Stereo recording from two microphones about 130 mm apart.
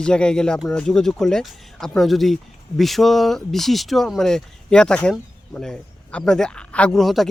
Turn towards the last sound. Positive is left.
turn(degrees=0)  # may be behind; listen again after turning